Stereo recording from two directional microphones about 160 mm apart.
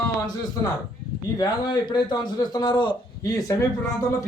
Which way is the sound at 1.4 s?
25° left (ahead or behind).